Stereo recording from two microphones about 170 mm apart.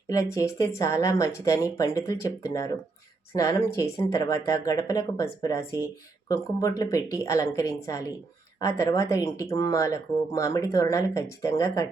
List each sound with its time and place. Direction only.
0.1 s speech: 20° left (ahead or behind)